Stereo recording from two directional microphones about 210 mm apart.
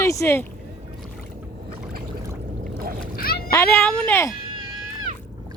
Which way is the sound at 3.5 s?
10° left (ahead or behind).